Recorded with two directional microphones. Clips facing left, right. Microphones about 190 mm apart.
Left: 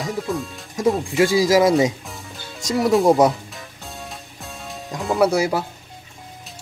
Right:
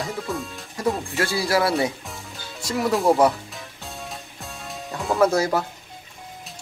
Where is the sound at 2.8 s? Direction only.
15° left (ahead or behind).